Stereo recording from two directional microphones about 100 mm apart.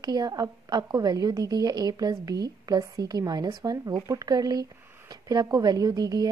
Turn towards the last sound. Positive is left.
turn(degrees=-40)  # may be behind; listen again after turning